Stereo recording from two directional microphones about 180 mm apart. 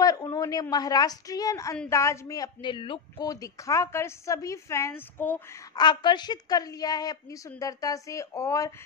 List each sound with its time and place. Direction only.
0.0 s a woman's voice: 20° left (ahead or behind)
5.8 s a woman's voice: 25° left (ahead or behind)